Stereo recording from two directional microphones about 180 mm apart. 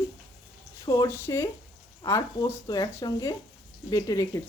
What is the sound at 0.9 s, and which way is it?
Speech, 20° left (ahead or behind).